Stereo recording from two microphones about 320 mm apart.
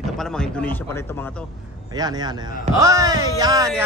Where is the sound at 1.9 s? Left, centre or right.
Centre.